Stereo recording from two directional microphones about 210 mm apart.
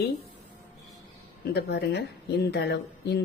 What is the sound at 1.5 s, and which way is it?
Speech, 50° left (ahead or behind).